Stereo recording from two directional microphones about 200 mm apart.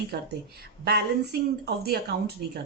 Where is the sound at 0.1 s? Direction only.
50° right (ahead or behind).